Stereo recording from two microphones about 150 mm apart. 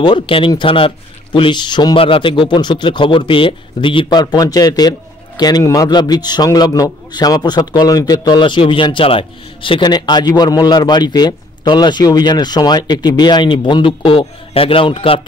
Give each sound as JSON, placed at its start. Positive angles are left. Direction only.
{"t": 0.0, "sound": "a man's voice", "side_deg": 35}